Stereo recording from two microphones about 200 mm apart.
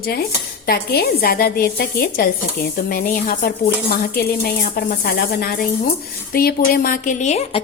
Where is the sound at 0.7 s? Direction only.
50° left (ahead or behind).